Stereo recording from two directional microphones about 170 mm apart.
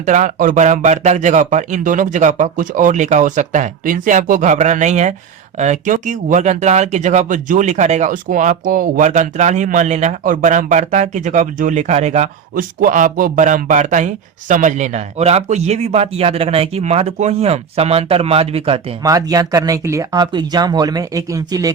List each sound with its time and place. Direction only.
0.0 s speech: 50° right (ahead or behind)
12.8 s a man's voice: 55° right (ahead or behind); by 18.9 s 35° right (ahead or behind)
19.0 s speech: 20° right (ahead or behind)